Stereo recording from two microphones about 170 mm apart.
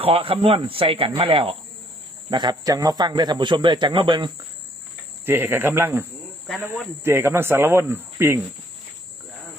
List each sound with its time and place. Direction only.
0.0 s a man's voice: 35° right (ahead or behind)
5.2 s speech: 10° right (ahead or behind)